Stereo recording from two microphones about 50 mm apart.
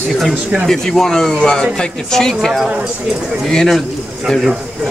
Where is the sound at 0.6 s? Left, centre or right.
Centre.